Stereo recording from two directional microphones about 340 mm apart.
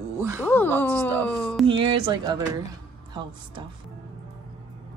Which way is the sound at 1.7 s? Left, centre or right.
Centre.